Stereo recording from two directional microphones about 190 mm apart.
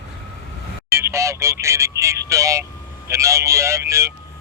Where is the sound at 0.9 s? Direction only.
15° right (ahead or behind).